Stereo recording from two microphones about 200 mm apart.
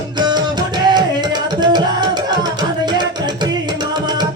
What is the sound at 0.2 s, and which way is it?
Music, 20° right (ahead or behind).